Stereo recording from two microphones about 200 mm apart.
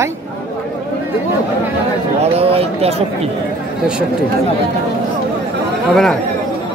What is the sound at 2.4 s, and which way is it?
Speech, 30° right (ahead or behind).